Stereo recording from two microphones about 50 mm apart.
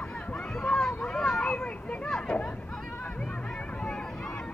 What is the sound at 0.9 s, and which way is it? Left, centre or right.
Children playing, centre.